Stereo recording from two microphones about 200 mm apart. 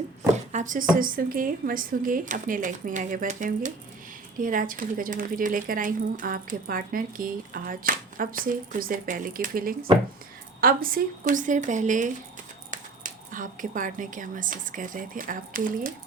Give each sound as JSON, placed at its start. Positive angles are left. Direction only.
{"t": 0.5, "sound": "speech", "side_deg": -40}